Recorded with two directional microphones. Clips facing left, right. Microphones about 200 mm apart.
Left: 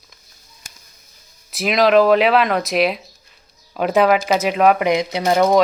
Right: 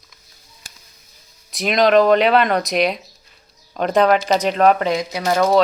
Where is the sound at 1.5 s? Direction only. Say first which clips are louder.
Even; centre (ahead or behind); by 5.6 s 20° left (ahead or behind).